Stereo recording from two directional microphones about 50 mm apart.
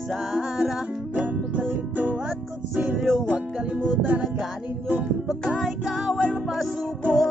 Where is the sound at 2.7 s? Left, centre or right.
Centre.